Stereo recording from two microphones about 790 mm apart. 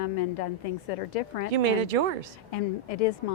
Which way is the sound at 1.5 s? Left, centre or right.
Right.